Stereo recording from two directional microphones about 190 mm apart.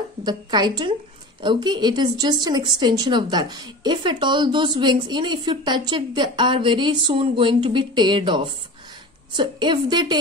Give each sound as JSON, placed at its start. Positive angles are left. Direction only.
{"t": 0.2, "sound": "a woman's voice", "side_deg": -20}